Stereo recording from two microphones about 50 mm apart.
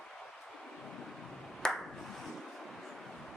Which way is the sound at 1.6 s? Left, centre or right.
Centre.